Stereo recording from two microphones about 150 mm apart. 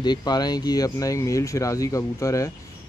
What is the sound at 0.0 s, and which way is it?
Speech, 30° left (ahead or behind).